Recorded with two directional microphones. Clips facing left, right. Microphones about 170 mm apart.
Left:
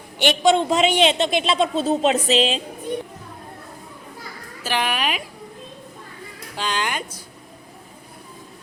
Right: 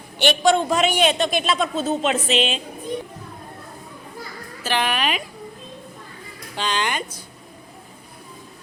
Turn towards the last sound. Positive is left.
turn(degrees=5)  # may be behind; listen again after turning